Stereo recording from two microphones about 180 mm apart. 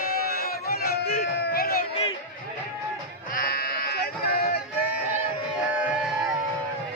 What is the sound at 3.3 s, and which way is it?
Sheep, 60° left (ahead or behind).